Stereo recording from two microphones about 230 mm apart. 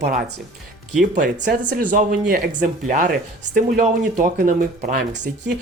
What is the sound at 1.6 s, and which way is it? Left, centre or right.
Speech, right.